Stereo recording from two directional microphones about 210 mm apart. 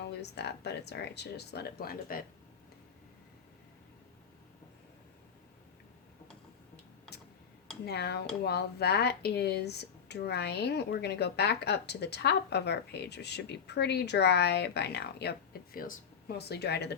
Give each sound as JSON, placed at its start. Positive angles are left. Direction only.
{"t": 0.1, "sound": "speech", "side_deg": 50}
{"t": 7.9, "sound": "speech", "side_deg": 50}